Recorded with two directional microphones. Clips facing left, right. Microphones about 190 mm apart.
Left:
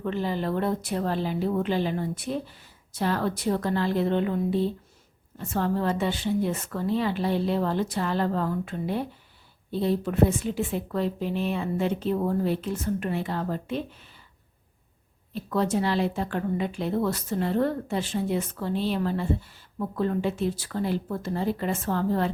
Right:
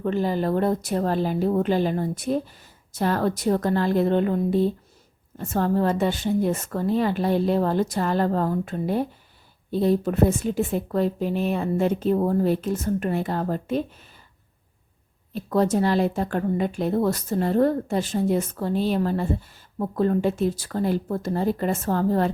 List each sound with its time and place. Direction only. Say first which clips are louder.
0.0 s speech: right 5 dB; 45° right (ahead or behind)
15.4 s speech: right 4 dB; 45° right (ahead or behind)